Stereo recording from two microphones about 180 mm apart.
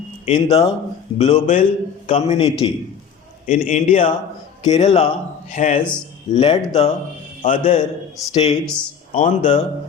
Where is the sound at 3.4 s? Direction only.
45° left (ahead or behind).